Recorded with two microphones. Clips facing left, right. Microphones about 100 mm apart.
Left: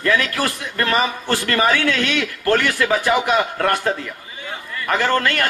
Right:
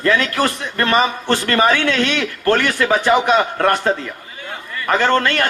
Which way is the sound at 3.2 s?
25° right (ahead or behind).